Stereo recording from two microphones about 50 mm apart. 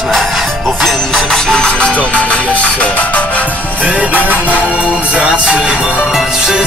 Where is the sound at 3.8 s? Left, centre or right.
Right.